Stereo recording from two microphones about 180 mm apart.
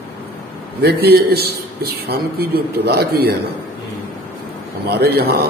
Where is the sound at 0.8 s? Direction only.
65° right (ahead or behind).